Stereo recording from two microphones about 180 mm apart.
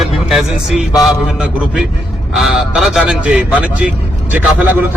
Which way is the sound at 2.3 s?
Centre (ahead or behind).